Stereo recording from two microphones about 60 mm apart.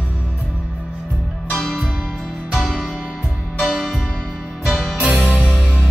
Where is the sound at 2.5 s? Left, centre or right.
Centre.